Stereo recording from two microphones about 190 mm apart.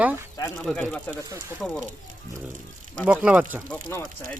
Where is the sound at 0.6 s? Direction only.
5° left (ahead or behind).